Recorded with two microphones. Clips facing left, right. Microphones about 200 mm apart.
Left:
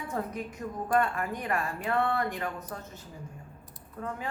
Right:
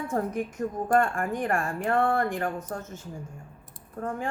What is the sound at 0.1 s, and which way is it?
A woman's voice, 45° right (ahead or behind).